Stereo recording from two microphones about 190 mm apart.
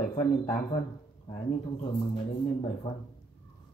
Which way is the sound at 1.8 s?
30° left (ahead or behind).